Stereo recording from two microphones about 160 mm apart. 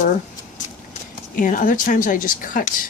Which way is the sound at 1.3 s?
55° left (ahead or behind).